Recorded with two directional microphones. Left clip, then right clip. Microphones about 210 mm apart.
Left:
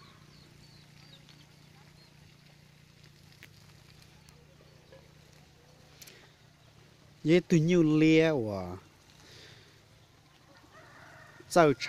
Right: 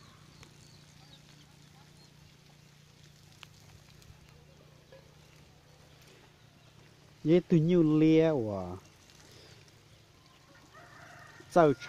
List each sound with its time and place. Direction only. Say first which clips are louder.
7.2 s speech: left 1 dB; centre (ahead or behind)
11.5 s speech: left 1 dB; centre (ahead or behind)